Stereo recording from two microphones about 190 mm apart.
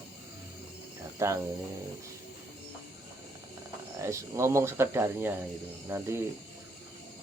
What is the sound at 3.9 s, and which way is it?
Speech, 15° right (ahead or behind).